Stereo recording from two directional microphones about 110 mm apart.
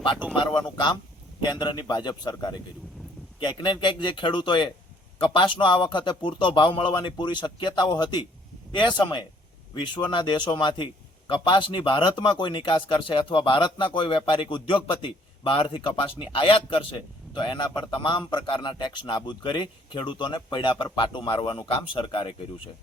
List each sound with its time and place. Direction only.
0.3 s a man's voice: 45° left (ahead or behind)